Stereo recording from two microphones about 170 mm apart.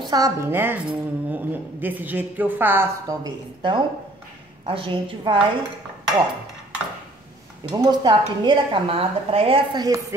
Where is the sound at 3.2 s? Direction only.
30° right (ahead or behind).